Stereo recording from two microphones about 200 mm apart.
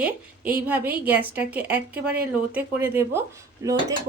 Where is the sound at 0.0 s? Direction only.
10° right (ahead or behind).